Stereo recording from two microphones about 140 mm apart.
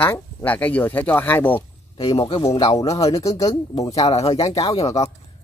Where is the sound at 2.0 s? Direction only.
35° left (ahead or behind).